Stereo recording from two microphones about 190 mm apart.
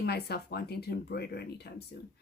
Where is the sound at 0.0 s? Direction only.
60° left (ahead or behind).